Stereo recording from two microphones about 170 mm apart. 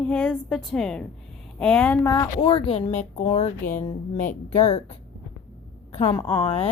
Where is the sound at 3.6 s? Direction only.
50° left (ahead or behind).